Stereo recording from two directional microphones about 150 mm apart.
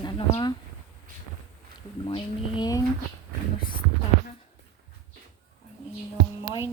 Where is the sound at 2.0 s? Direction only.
35° left (ahead or behind).